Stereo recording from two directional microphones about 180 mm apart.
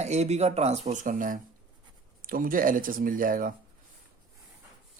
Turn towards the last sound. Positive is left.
turn(degrees=-50)  # may be behind; listen again after turning